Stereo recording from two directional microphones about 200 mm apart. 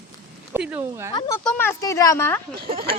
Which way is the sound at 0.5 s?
10° right (ahead or behind).